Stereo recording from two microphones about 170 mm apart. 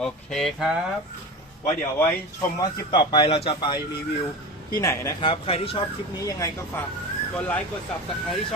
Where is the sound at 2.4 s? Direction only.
25° left (ahead or behind).